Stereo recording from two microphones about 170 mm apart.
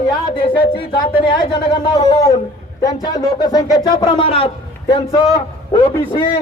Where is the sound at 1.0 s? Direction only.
30° left (ahead or behind).